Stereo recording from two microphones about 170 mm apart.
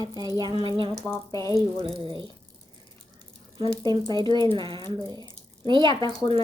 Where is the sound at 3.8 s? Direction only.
25° right (ahead or behind).